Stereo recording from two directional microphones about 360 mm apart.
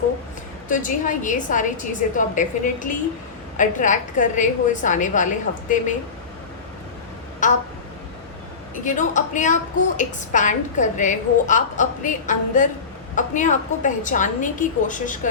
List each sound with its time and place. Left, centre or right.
0.7 s a woman's voice: left
7.4 s a woman's voice: left
8.8 s a woman's voice: left